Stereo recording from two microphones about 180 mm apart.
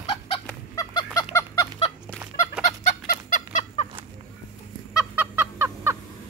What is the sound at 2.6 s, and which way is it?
Fowl, 45° left (ahead or behind).